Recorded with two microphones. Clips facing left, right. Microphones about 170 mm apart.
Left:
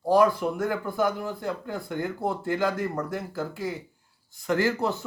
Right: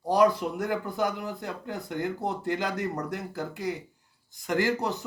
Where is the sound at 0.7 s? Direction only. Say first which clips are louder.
Left 1 dB; 20° right (ahead or behind).